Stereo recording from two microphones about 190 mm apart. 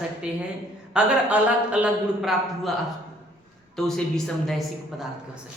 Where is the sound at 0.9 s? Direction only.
5° right (ahead or behind).